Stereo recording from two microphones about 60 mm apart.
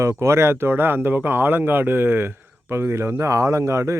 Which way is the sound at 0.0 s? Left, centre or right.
Right.